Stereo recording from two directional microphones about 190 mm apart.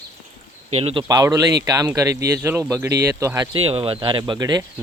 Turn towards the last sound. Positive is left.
turn(degrees=-20)  # may be behind; listen again after turning